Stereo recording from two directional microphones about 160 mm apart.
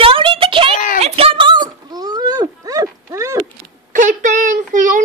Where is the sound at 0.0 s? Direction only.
35° right (ahead or behind).